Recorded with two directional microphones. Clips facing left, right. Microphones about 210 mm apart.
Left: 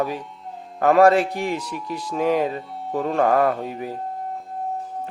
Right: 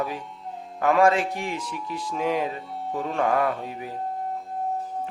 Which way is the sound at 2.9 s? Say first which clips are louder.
Left 5 dB; 40° left (ahead or behind).